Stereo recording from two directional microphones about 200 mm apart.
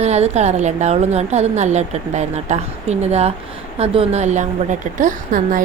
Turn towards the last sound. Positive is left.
turn(degrees=-40)  # may be behind; listen again after turning